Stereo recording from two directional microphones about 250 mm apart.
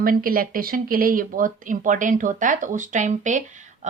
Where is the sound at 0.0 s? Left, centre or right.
Right.